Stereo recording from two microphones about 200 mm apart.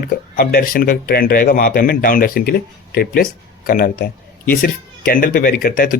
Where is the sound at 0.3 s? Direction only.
50° left (ahead or behind).